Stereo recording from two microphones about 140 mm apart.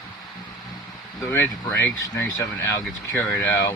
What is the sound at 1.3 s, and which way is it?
Speech, 15° left (ahead or behind).